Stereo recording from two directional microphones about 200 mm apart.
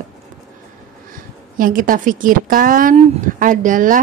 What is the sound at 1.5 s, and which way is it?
A woman's voice, 45° right (ahead or behind).